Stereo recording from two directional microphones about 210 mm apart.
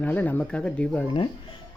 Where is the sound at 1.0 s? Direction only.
25° left (ahead or behind).